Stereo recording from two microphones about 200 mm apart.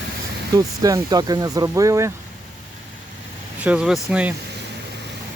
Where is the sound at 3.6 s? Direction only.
5° right (ahead or behind).